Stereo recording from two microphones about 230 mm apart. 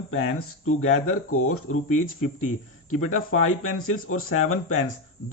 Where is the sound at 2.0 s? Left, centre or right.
Left.